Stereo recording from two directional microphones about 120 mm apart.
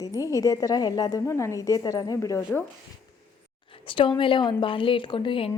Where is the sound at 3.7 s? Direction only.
45° left (ahead or behind).